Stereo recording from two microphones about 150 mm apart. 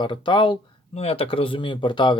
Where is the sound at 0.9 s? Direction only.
45° left (ahead or behind).